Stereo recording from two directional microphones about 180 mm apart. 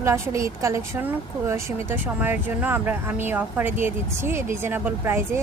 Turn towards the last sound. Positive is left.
turn(degrees=-15)  # may be behind; listen again after turning